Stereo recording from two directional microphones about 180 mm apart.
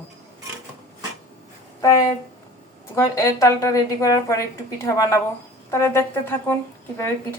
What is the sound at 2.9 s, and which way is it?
A woman's voice, 15° left (ahead or behind).